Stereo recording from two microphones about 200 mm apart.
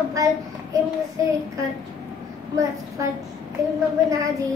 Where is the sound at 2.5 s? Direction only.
15° right (ahead or behind).